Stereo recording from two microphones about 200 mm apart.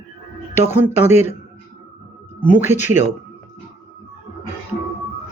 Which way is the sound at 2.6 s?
35° left (ahead or behind).